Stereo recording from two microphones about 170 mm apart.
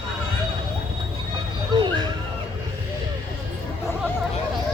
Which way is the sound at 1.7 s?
25° right (ahead or behind).